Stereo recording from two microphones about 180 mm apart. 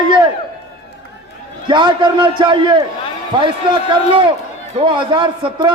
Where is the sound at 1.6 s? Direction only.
25° right (ahead or behind).